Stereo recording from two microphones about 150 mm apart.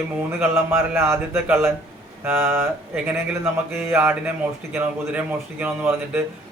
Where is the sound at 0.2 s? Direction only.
15° right (ahead or behind).